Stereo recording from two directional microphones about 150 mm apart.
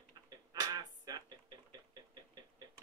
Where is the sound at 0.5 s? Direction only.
25° right (ahead or behind).